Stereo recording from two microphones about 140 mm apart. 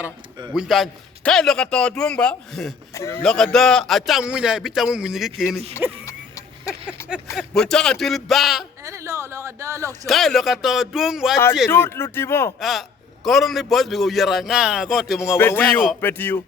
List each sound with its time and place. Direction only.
0.5 s a man's voice: centre (ahead or behind)
2.9 s speech: 20° left (ahead or behind)
3.2 s a man's voice: 5° left (ahead or behind)
6.1 s a sound: 20° left (ahead or behind)
7.0 s speech: 15° left (ahead or behind)
7.3 s a man's voice: 5° left (ahead or behind)
8.8 s a woman's voice: 20° right (ahead or behind)
10.1 s a man's voice: centre (ahead or behind)
11.7 s speech: 15° left (ahead or behind)
12.5 s a man's voice: centre (ahead or behind)
15.4 s speech: 15° left (ahead or behind)